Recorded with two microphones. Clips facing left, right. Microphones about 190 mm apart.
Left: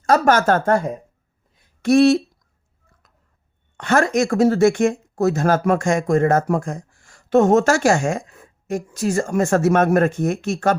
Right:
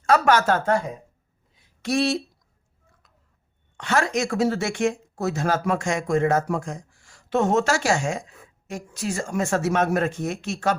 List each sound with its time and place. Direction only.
0.0 s speech: 45° left (ahead or behind)
3.8 s speech: 50° left (ahead or behind)